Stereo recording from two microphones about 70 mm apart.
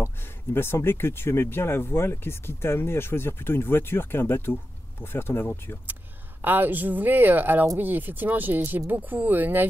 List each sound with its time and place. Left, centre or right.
0.0 s speech: left
6.4 s speech: right